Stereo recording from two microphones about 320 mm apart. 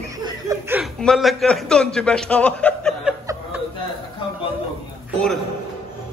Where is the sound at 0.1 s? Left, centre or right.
Centre.